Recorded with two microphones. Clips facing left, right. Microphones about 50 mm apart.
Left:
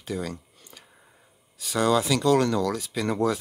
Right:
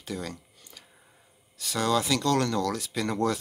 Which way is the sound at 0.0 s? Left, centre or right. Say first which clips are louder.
Left 4 dB; centre.